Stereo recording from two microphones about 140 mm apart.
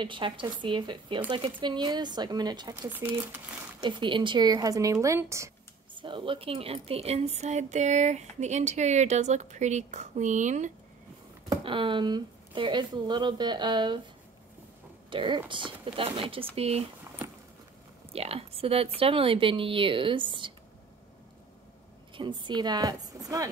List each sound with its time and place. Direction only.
0.0 s speech: 35° right (ahead or behind)
2.9 s speech: 10° right (ahead or behind)
3.8 s speech: 35° right (ahead or behind)
5.9 s speech: 35° right (ahead or behind); by 10.7 s 60° right (ahead or behind)
11.6 s speech: 35° right (ahead or behind)
15.0 s speech: 35° right (ahead or behind)
18.1 s speech: 45° right (ahead or behind)
22.1 s speech: 35° right (ahead or behind)